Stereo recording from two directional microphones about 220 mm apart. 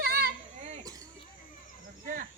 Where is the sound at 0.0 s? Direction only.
45° right (ahead or behind).